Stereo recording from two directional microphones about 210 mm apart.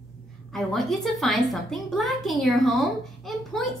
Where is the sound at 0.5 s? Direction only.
Centre (ahead or behind).